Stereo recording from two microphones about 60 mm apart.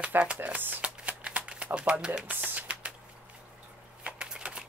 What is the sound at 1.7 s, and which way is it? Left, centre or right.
Speech, right.